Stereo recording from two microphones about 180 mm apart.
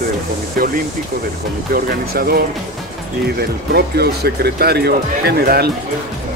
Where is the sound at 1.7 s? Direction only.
55° right (ahead or behind).